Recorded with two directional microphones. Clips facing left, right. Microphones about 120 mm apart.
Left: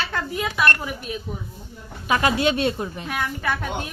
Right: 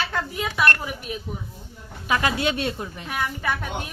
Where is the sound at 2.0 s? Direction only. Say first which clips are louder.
Left 3 dB; 25° left (ahead or behind).